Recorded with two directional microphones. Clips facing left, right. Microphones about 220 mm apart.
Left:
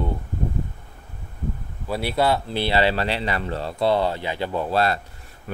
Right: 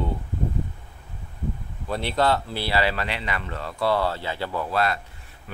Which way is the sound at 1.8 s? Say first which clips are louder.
Left 1 dB; 10° left (ahead or behind).